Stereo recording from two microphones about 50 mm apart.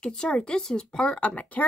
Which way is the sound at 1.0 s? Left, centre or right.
Left.